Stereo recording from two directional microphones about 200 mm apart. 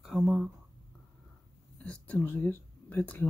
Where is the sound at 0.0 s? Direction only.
Centre (ahead or behind).